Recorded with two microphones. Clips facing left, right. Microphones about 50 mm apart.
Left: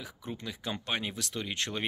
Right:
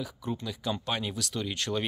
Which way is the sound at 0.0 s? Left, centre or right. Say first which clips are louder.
Right 5 dB; left.